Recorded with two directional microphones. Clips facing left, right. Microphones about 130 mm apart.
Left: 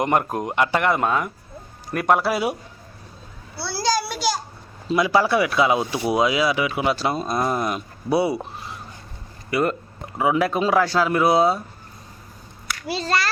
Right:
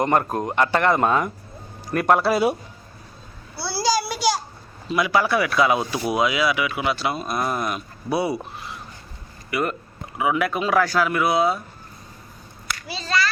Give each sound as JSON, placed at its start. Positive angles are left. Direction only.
{"t": 0.0, "sound": "speech", "side_deg": 15}
{"t": 3.6, "sound": "a sound", "side_deg": -5}
{"t": 4.9, "sound": "speech", "side_deg": 30}
{"t": 7.3, "sound": "speech", "side_deg": 25}
{"t": 9.5, "sound": "speech", "side_deg": 30}